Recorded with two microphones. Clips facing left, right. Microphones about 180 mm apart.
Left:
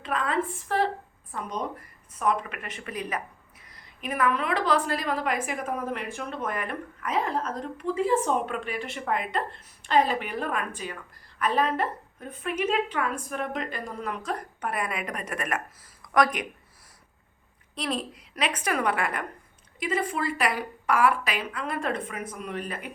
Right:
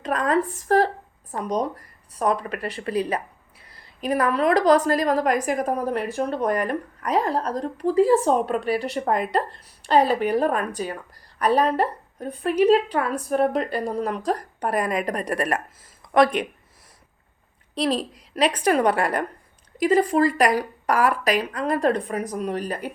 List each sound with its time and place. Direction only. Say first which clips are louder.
0.0 s a woman's voice: right 6 dB; 40° right (ahead or behind)
17.7 s a woman's voice: right 7 dB; 35° right (ahead or behind)